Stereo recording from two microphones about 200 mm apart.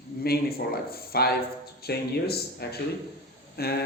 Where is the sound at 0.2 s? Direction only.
50° left (ahead or behind).